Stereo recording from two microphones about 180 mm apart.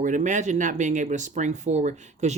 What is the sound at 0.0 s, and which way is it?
Speech, 45° right (ahead or behind).